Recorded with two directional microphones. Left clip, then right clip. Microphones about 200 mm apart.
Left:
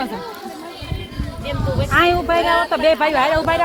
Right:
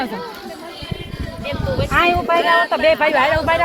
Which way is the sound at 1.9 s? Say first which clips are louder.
Even; 70° left (ahead or behind).